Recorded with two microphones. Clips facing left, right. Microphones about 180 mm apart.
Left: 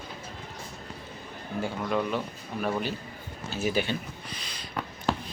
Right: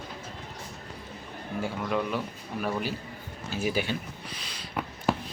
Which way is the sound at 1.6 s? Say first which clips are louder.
Left 1 dB; 5° right (ahead or behind).